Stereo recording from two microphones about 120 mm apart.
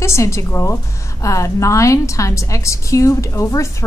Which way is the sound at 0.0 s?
25° left (ahead or behind).